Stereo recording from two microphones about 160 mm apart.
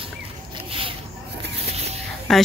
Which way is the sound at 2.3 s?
Centre (ahead or behind).